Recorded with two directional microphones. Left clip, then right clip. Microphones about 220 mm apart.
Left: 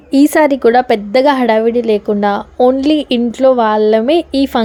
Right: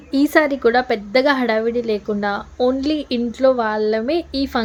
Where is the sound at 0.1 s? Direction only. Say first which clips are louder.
Left 6 dB; 35° left (ahead or behind).